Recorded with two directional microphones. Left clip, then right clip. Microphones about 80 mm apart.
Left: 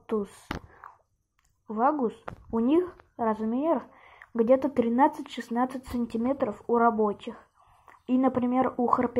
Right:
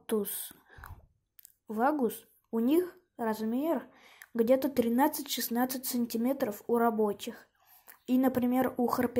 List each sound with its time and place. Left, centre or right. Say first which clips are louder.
0.0 s a sound: left 2 dB; right
1.7 s a woman's voice: left 4 dB; right
5.9 s a woman's voice: left 3 dB; right